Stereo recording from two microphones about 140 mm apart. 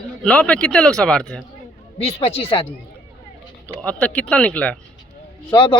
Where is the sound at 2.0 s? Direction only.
45° left (ahead or behind).